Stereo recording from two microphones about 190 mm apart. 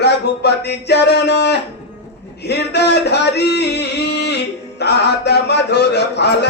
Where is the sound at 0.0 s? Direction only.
60° left (ahead or behind).